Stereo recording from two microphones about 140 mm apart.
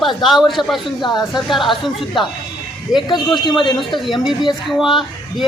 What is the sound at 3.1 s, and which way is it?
Speech, 30° left (ahead or behind).